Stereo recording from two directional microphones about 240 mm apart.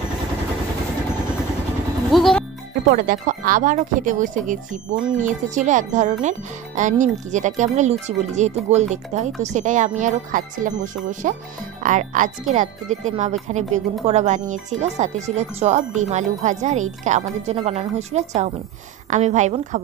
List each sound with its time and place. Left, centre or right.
2.0 s speech: centre
2.9 s speech: right